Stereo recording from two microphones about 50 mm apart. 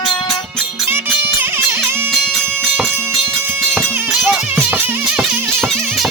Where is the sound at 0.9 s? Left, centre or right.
Right.